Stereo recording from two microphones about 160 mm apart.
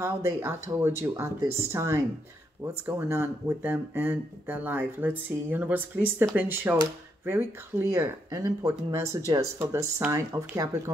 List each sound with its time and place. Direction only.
0.0 s speech: 15° right (ahead or behind)